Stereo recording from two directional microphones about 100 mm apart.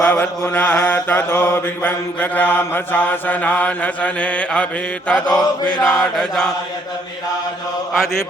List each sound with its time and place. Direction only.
0.0 s mantra: 20° left (ahead or behind)
5.6 s mantra: 45° left (ahead or behind)
6.0 s mantra: 5° left (ahead or behind)